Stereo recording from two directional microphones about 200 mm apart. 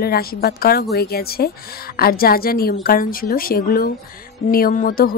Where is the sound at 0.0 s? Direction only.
50° left (ahead or behind).